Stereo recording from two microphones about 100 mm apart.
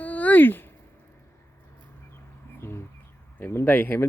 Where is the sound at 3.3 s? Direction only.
20° left (ahead or behind).